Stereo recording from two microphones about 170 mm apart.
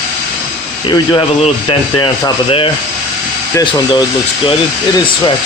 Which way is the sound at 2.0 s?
30° left (ahead or behind).